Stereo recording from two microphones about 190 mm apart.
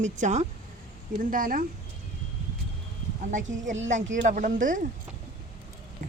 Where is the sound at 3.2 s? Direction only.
40° right (ahead or behind).